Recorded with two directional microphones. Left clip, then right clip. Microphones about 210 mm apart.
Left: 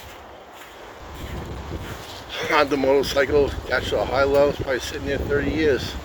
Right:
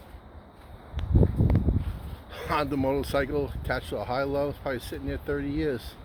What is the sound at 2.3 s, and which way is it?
Speech, centre (ahead or behind).